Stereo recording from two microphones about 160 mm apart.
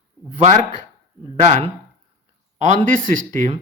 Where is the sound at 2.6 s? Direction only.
55° right (ahead or behind).